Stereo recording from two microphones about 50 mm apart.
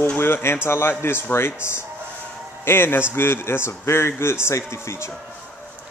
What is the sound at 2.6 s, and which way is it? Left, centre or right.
A man's voice, left.